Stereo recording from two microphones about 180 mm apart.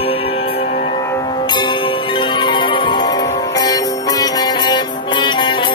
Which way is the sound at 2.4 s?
25° left (ahead or behind).